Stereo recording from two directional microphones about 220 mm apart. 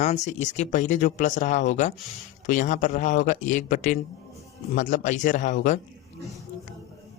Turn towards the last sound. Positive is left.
turn(degrees=35)  # may be behind; listen again after turning